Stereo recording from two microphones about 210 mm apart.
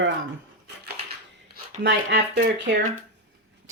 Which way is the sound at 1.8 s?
55° right (ahead or behind).